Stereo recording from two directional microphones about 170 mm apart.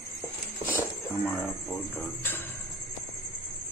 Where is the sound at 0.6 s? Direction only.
10° left (ahead or behind).